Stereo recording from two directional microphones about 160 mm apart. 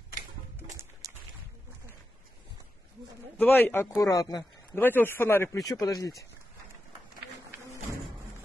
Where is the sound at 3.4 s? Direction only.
10° left (ahead or behind).